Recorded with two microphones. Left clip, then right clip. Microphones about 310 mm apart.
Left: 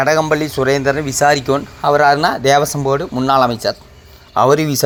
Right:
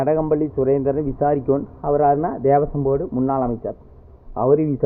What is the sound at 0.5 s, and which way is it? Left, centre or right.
Speech, centre.